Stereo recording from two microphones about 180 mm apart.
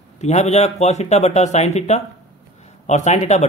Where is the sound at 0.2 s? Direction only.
40° left (ahead or behind).